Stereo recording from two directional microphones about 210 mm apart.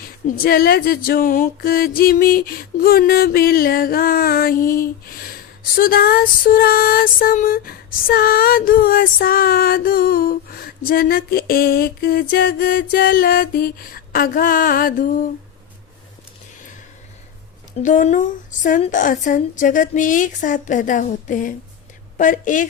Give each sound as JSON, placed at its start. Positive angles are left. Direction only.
{"t": 0.3, "sound": "music", "side_deg": 45}
{"t": 17.8, "sound": "a woman's voice", "side_deg": 35}